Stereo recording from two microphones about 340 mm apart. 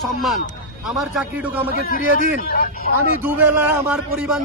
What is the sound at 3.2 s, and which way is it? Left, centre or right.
A man's voice, centre.